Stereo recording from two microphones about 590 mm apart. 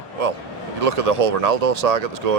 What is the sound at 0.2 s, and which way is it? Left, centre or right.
Speech, right.